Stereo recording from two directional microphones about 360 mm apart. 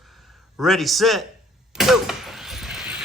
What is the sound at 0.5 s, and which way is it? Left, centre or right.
Speech, centre.